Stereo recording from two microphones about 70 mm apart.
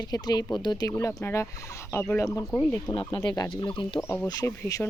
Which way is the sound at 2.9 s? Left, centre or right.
Left.